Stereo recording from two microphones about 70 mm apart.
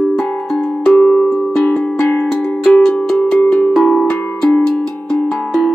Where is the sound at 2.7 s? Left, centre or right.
Centre.